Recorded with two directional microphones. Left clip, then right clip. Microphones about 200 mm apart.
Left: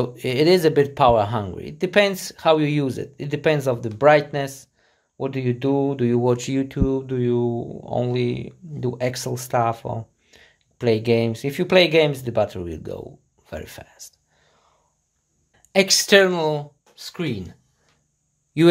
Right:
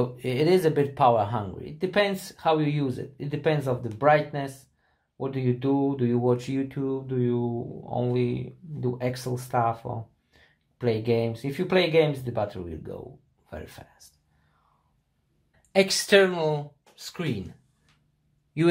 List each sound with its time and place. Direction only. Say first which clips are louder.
0.0 s speech: left 6 dB; 50° left (ahead or behind)
15.7 s speech: left 5 dB; 45° left (ahead or behind)